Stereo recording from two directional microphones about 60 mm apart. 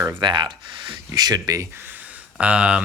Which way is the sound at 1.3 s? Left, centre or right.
Right.